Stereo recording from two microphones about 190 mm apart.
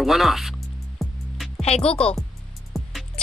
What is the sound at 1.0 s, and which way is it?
Music, centre (ahead or behind).